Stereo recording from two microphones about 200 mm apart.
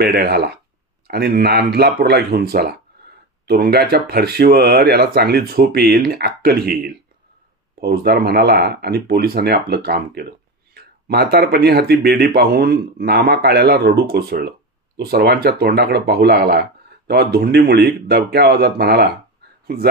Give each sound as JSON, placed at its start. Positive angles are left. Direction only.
{"t": 0.0, "sound": "speech", "side_deg": -55}